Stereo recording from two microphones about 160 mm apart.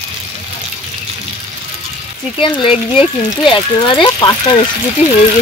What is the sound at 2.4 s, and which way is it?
Speech, 35° left (ahead or behind).